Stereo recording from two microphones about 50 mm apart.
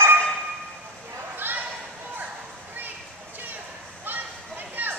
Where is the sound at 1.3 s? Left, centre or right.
Right.